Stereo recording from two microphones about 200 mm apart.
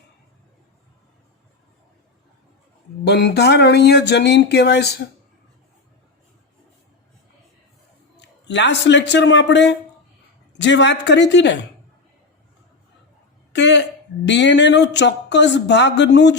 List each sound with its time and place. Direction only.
3.0 s speech: 55° left (ahead or behind)
8.4 s speech: 60° left (ahead or behind)
13.5 s speech: 65° left (ahead or behind)